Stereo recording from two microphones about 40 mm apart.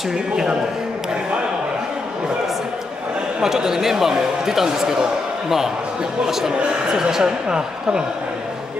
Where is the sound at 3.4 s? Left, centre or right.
Centre.